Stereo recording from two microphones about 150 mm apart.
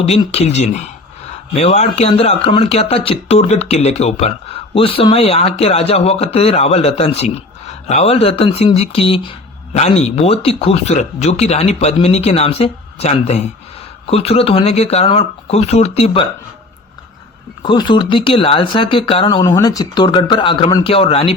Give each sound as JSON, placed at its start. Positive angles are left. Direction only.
{"t": 0.3, "sound": "speech", "side_deg": 50}
{"t": 17.6, "sound": "speech", "side_deg": 30}
{"t": 19.4, "sound": "a man's voice", "side_deg": 25}